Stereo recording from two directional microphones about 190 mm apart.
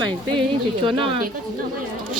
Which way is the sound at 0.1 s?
25° right (ahead or behind).